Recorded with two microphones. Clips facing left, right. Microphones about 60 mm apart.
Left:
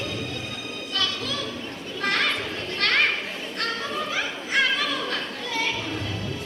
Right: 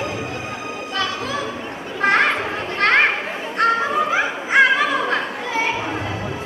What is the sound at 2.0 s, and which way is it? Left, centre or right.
Children playing, right.